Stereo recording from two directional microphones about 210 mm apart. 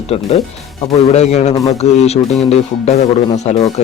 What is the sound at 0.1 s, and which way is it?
Speech, 30° left (ahead or behind).